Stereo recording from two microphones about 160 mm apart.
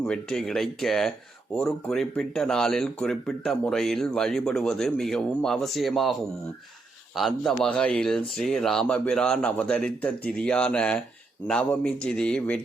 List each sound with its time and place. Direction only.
0.0 s speech: 5° left (ahead or behind)
7.2 s a man's voice: centre (ahead or behind)